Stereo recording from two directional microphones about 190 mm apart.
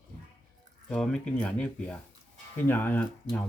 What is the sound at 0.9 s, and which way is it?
Speech, 5° left (ahead or behind).